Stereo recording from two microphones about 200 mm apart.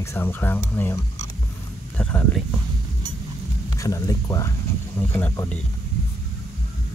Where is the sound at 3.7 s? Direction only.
15° left (ahead or behind).